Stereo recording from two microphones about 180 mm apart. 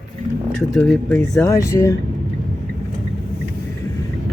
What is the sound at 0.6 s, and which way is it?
Speech, centre (ahead or behind).